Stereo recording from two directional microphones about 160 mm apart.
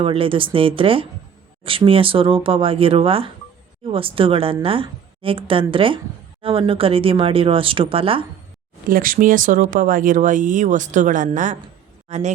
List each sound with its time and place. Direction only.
0.0 s speech: 35° right (ahead or behind)
8.9 s a man's voice: 60° right (ahead or behind); by 12.3 s 45° right (ahead or behind)